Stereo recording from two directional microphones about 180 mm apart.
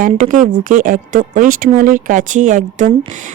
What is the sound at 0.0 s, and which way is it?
Speech, 45° right (ahead or behind).